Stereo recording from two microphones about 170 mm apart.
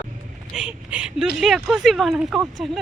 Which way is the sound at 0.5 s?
5° right (ahead or behind).